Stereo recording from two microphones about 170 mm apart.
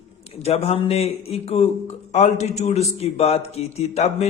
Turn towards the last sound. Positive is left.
turn(degrees=40)  # may be behind; listen again after turning